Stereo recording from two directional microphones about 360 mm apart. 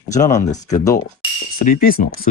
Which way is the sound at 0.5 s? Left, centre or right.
Centre.